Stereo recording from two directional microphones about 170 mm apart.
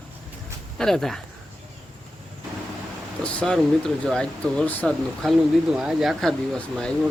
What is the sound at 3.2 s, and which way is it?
Speech, 5° left (ahead or behind).